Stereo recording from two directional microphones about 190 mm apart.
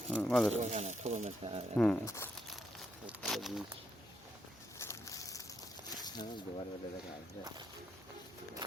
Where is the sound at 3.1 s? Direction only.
Centre (ahead or behind).